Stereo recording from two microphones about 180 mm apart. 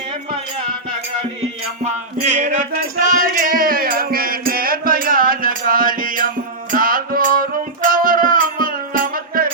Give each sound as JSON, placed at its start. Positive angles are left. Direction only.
{"t": 1.4, "sound": "music", "side_deg": -40}